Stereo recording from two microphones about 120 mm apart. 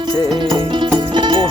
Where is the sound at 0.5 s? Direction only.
45° right (ahead or behind).